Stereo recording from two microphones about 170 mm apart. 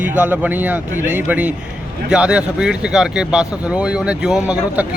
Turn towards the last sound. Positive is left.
turn(degrees=-5)  # may be behind; listen again after turning